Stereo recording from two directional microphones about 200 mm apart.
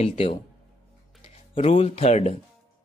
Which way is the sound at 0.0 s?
30° left (ahead or behind).